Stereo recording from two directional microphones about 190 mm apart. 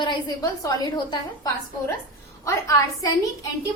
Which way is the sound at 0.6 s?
20° left (ahead or behind).